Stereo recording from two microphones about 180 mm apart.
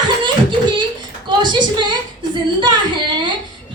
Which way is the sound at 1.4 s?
25° right (ahead or behind).